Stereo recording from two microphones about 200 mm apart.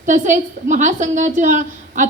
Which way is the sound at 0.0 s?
40° right (ahead or behind).